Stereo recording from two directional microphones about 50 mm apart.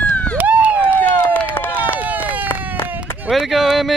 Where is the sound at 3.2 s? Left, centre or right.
Centre.